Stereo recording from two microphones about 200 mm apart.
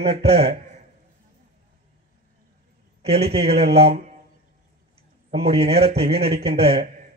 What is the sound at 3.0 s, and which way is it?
Speech, 30° right (ahead or behind).